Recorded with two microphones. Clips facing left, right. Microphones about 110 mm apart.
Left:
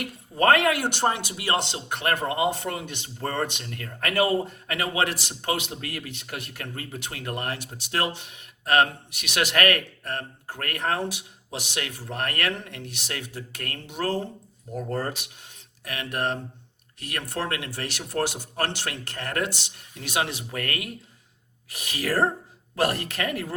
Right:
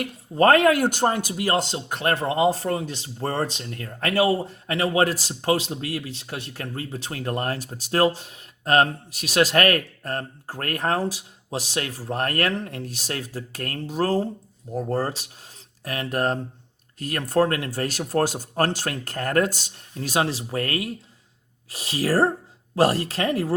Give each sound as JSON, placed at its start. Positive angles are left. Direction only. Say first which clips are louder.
{"t": 0.0, "sound": "speech", "louder": "right 4 dB", "side_deg": -35}